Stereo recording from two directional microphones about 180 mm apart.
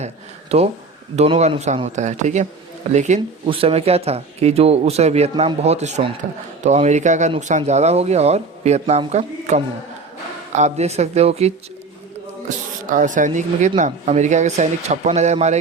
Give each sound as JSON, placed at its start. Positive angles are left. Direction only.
{"t": 0.5, "sound": "speech", "side_deg": -35}
{"t": 12.5, "sound": "speech", "side_deg": -45}